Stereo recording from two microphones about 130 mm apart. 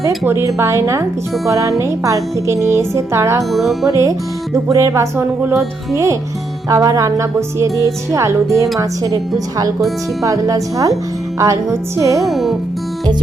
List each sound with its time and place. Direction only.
0.3 s music: 20° right (ahead or behind)
3.5 s speech: centre (ahead or behind)
3.8 s music: 25° right (ahead or behind)
10.2 s music: 25° right (ahead or behind)
12.2 s speech: centre (ahead or behind)